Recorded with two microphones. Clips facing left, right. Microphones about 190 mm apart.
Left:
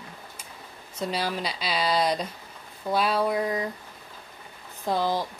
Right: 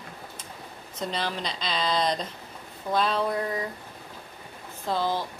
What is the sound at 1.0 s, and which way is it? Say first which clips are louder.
Speech: left 2 dB; 10° left (ahead or behind).